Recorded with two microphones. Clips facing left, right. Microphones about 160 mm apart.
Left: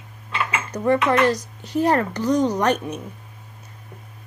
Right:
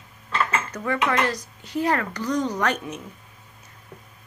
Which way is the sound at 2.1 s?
20° left (ahead or behind).